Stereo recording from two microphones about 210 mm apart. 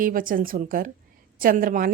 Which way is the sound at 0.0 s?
40° right (ahead or behind).